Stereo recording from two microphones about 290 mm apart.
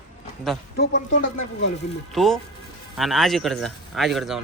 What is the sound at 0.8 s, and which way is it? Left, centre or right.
Speech, left.